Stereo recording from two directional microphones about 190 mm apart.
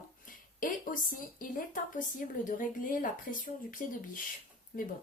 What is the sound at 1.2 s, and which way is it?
Speech, 45° left (ahead or behind).